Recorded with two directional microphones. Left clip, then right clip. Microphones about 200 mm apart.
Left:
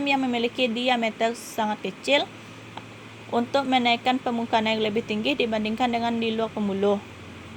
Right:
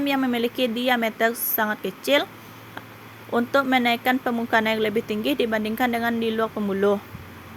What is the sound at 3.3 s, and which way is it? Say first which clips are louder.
Speech: right 2 dB; 60° right (ahead or behind).